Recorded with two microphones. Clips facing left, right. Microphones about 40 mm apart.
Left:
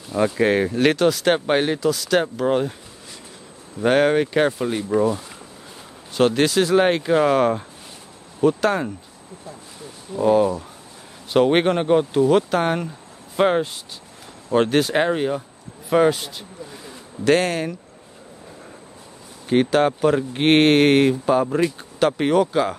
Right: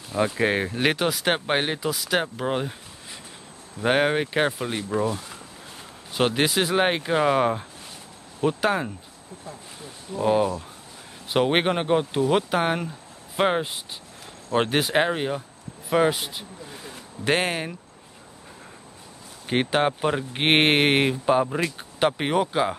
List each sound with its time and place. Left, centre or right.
0.1 s speech: centre
3.8 s speech: centre
6.1 s speech: centre
10.2 s speech: centre
17.2 s speech: right
19.5 s speech: right